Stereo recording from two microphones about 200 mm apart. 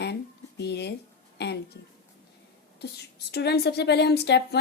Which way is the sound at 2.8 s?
55° left (ahead or behind).